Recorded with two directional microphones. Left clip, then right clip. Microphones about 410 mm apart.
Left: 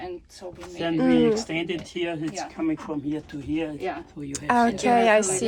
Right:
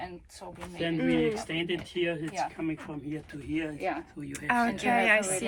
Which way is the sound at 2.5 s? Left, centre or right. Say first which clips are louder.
Left 7 dB; left.